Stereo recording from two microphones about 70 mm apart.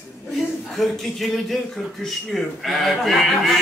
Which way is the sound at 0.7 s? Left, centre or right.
Centre.